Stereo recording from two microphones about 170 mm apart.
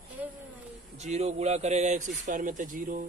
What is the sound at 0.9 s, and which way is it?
A man's voice, 40° right (ahead or behind).